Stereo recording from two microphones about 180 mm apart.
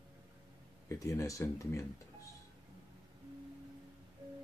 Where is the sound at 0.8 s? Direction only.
15° left (ahead or behind).